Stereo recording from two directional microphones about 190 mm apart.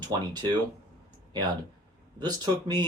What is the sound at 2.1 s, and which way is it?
Speech, 20° right (ahead or behind).